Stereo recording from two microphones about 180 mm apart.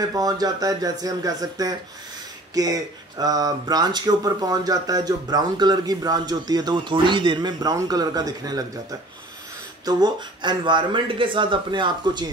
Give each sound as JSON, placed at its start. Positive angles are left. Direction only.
{"t": 0.1, "sound": "speech", "side_deg": -20}
{"t": 9.8, "sound": "speech", "side_deg": -25}